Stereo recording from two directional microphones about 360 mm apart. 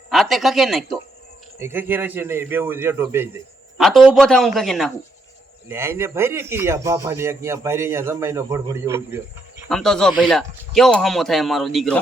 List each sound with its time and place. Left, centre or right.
0.1 s speech: centre